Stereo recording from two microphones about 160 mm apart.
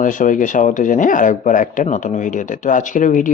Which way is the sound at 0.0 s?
55° left (ahead or behind).